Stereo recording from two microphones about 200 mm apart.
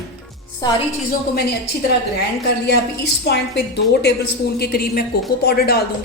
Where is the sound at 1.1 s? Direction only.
50° left (ahead or behind).